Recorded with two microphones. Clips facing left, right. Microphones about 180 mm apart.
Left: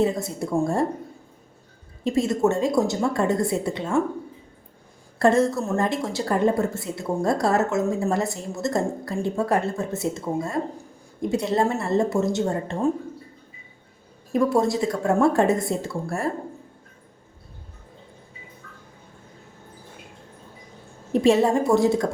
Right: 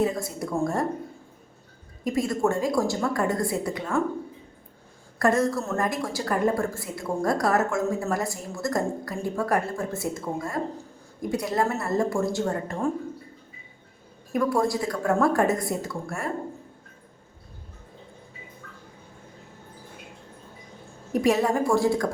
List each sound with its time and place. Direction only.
0.0 s a woman's voice: 25° left (ahead or behind)
2.0 s a woman's voice: 25° left (ahead or behind)
5.2 s a woman's voice: 25° left (ahead or behind)
14.3 s a woman's voice: 25° left (ahead or behind)
21.1 s a woman's voice: 25° left (ahead or behind)